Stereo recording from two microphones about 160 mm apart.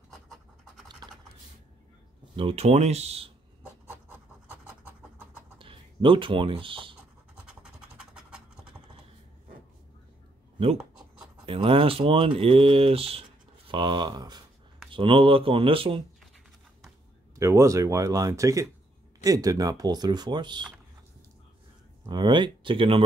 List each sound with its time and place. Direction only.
0.8 s scratch: 25° right (ahead or behind)
2.3 s speech: 40° right (ahead or behind)
5.6 s speech: 35° right (ahead or behind)
7.4 s scratch: 5° right (ahead or behind)
11.4 s speech: 35° right (ahead or behind)
17.4 s speech: 20° right (ahead or behind)
22.0 s speech: 30° right (ahead or behind)